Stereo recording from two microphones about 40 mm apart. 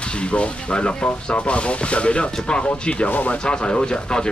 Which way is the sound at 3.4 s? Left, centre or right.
Left.